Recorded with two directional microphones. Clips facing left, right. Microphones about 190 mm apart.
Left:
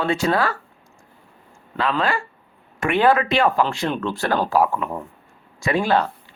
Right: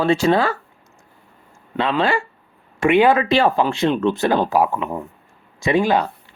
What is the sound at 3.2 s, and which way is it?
Speech, 30° right (ahead or behind).